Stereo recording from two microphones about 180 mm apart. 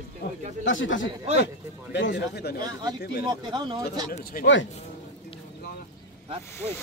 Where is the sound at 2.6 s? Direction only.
20° right (ahead or behind).